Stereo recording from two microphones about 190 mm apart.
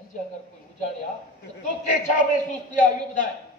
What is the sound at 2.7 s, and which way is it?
Speech, 40° left (ahead or behind).